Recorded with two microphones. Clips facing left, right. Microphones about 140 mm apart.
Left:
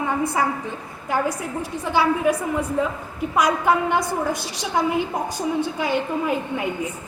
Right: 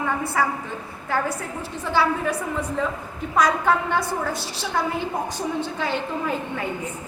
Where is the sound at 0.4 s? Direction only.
20° left (ahead or behind).